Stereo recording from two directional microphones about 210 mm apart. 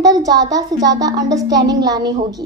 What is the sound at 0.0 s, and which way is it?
A woman's voice, 20° right (ahead or behind).